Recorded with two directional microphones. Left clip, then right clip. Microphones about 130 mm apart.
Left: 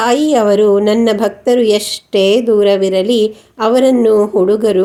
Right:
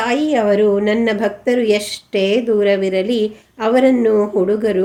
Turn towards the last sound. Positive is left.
turn(degrees=45)  # may be behind; listen again after turning